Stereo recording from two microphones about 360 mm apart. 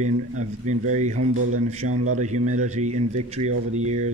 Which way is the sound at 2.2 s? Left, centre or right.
Centre.